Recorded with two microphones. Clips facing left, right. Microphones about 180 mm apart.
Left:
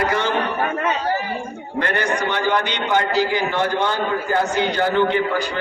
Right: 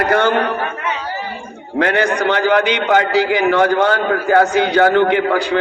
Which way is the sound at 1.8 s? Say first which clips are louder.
Right 6 dB; 85° right.